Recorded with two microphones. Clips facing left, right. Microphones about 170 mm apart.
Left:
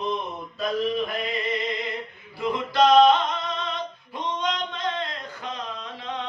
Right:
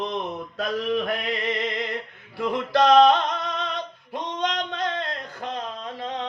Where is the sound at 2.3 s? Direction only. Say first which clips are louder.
Even; 75° right (ahead or behind).